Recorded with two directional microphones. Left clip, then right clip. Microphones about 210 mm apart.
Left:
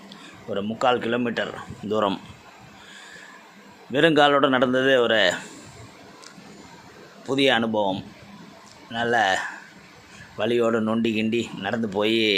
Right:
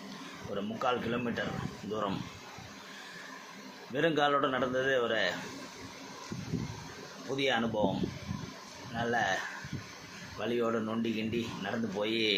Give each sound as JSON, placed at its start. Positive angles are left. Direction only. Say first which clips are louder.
{"t": 0.5, "sound": "speech", "louder": "left 10 dB", "side_deg": 45}
{"t": 3.9, "sound": "speech", "louder": "left 11 dB", "side_deg": 50}
{"t": 7.3, "sound": "speech", "louder": "left 11 dB", "side_deg": 55}
{"t": 9.0, "sound": "speech", "louder": "left 10 dB", "side_deg": 50}